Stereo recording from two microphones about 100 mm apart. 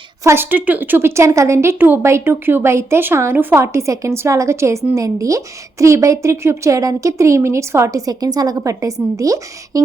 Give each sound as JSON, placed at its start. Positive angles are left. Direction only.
{"t": 0.3, "sound": "a woman's voice", "side_deg": -20}